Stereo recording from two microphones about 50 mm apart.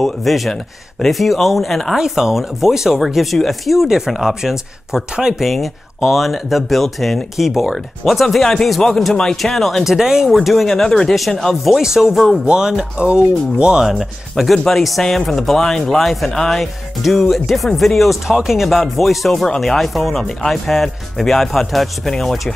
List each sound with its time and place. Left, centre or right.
0.0 s speech: centre
2.0 s speech: centre
9.1 s speech: centre
9.9 s speech: centre
11.7 s speech: centre
13.8 s speech: centre